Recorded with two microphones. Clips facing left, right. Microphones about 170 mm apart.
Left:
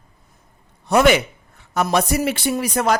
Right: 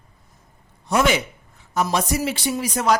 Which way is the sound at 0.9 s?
65° left (ahead or behind).